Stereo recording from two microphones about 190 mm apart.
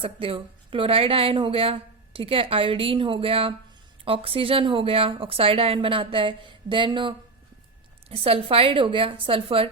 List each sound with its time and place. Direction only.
0.0 s speech: 30° right (ahead or behind)
8.1 s speech: 30° right (ahead or behind)